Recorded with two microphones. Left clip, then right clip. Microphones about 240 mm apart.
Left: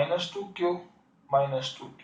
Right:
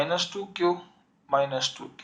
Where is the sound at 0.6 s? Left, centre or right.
Right.